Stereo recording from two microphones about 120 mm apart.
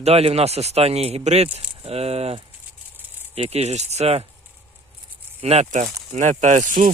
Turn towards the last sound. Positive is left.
turn(degrees=-90)